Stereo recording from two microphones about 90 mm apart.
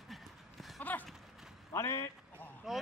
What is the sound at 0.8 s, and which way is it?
Clip-clop, 20° left (ahead or behind).